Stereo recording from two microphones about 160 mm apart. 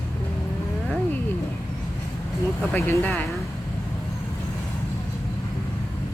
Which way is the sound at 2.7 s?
15° left (ahead or behind).